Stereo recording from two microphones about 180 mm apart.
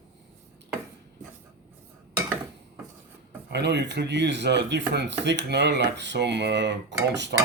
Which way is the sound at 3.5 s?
70° right (ahead or behind).